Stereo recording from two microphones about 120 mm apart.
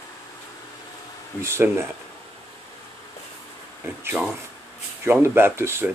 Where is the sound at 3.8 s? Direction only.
15° right (ahead or behind).